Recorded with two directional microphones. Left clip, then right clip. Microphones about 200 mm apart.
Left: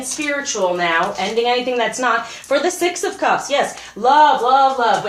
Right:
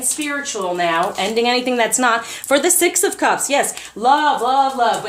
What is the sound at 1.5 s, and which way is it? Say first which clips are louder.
A woman's voice: right 1 dB; 45° right (ahead or behind).